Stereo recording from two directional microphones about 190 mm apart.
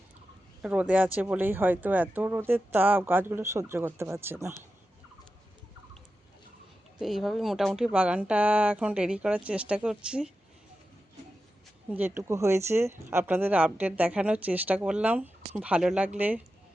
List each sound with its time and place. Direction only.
0.6 s speech: 5° right (ahead or behind)
7.0 s speech: centre (ahead or behind)
11.9 s speech: 10° right (ahead or behind)